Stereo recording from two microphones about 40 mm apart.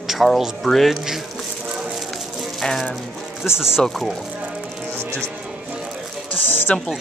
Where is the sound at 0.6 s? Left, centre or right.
Centre.